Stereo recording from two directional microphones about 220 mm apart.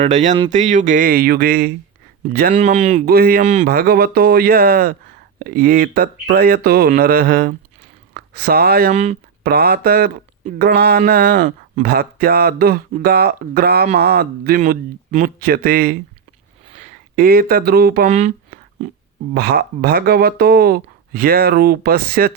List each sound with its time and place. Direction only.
0.0 s speech: 35° right (ahead or behind)
0.3 s speech: 20° right (ahead or behind)
0.6 s speech: 35° right (ahead or behind)
19.3 s speech: 45° right (ahead or behind)